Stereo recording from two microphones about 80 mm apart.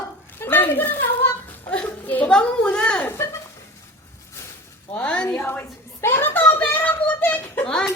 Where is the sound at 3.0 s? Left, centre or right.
Left.